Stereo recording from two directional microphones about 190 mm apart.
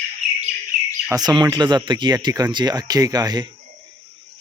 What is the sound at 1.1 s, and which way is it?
Speech, 20° right (ahead or behind).